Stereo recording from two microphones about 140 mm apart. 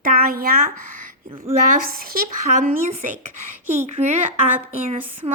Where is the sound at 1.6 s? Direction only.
80° right.